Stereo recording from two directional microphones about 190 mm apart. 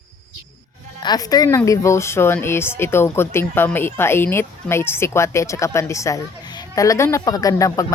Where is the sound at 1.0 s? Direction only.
20° left (ahead or behind).